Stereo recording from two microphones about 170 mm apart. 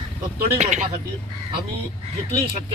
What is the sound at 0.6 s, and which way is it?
Speech, 45° right (ahead or behind).